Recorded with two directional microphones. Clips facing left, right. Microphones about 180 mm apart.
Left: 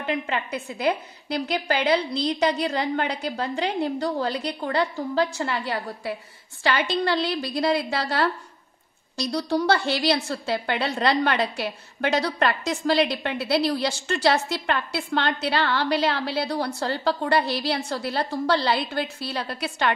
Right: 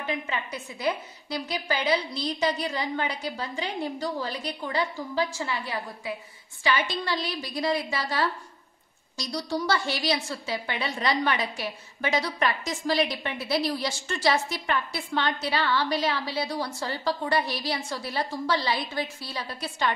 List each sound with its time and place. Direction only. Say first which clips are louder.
0.0 s a woman's voice: left 4 dB; 65° left (ahead or behind)